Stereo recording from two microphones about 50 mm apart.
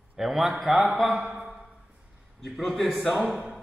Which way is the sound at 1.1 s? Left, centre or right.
Right.